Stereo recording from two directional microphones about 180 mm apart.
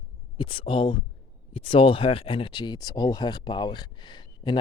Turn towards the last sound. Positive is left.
turn(degrees=25)  # may be behind; listen again after turning